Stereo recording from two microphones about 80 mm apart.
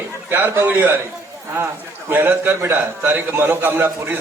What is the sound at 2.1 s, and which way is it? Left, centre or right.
A man's voice, right.